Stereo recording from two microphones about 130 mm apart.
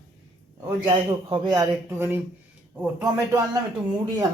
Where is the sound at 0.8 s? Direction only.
40° right (ahead or behind).